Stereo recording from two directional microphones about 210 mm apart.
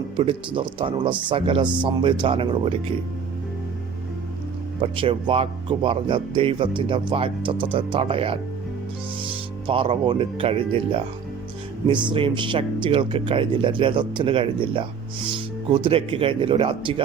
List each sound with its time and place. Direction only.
0.2 s speech: 25° right (ahead or behind)
4.8 s speech: 25° right (ahead or behind)
12.1 s speech: 25° right (ahead or behind)